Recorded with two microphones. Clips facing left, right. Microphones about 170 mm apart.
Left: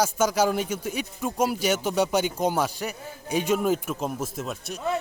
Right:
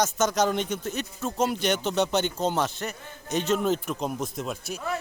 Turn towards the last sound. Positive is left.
turn(degrees=0)  # may be behind; listen again after turning